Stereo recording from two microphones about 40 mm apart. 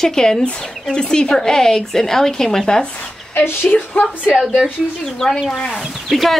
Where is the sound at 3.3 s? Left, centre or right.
Left.